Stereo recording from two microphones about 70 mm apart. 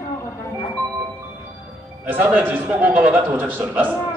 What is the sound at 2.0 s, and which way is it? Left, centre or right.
Speech, right.